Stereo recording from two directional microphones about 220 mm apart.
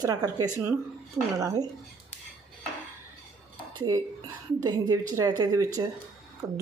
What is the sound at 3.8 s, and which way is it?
A woman's voice, 15° right (ahead or behind).